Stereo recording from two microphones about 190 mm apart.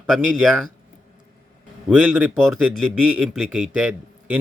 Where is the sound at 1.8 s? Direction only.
5° right (ahead or behind).